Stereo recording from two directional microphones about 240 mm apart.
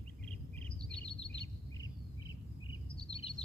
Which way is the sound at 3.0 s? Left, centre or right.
Left.